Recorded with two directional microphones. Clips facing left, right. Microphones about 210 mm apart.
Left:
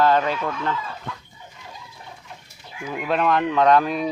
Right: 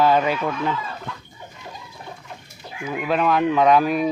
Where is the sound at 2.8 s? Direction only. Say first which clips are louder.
Right 1 dB; centre (ahead or behind).